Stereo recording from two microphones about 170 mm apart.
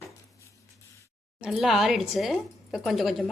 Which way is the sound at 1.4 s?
Centre (ahead or behind).